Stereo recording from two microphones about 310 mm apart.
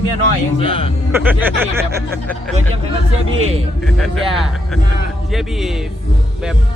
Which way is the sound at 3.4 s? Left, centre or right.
Centre.